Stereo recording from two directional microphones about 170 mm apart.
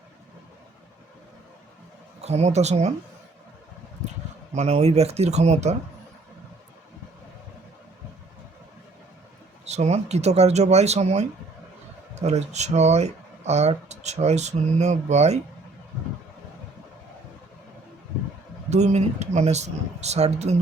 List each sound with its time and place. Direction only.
2.2 s speech: 40° right (ahead or behind)
4.5 s speech: 40° right (ahead or behind)
9.6 s speech: 40° right (ahead or behind)
18.7 s speech: 40° right (ahead or behind)